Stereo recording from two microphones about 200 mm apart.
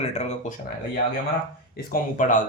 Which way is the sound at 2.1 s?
40° left (ahead or behind).